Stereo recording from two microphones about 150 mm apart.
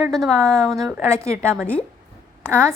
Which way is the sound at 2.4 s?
15° right (ahead or behind).